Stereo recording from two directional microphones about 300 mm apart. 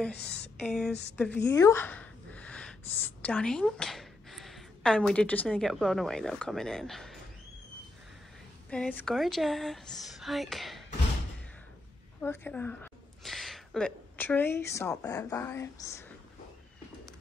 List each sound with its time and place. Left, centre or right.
0.1 s speech: left
0.6 s speech: centre
8.6 s speech: centre
12.2 s a woman's voice: centre